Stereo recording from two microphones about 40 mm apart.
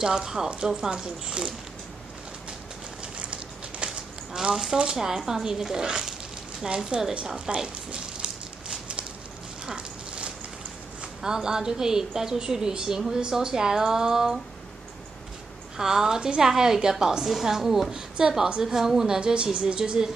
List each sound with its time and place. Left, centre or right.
0.0 s a woman's voice: centre
3.8 s livestock: right
4.9 s a woman's voice: centre
7.3 s a sound: right
11.0 s a woman's voice: centre
15.8 s a woman's voice: centre
19.1 s a woman's voice: right